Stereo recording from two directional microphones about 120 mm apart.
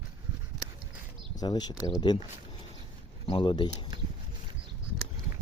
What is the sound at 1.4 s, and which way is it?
Speech, 35° left (ahead or behind).